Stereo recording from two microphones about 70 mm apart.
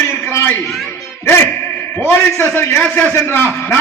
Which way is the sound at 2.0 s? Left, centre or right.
Left.